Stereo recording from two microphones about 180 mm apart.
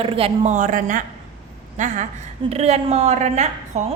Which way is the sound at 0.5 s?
45° right (ahead or behind).